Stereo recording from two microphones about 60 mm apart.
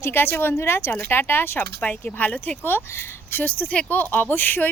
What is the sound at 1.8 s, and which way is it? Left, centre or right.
Speech, left.